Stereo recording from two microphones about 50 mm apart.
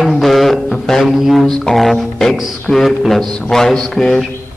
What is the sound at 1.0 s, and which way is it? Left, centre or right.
Music, centre.